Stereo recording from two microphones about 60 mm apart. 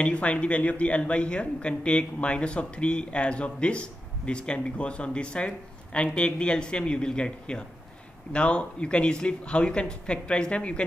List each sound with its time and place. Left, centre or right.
0.0 s speech: centre